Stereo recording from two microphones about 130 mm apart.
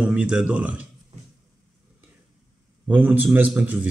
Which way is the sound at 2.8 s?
10° right (ahead or behind).